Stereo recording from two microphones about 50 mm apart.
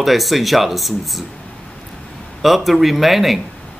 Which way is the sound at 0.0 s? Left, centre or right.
Centre.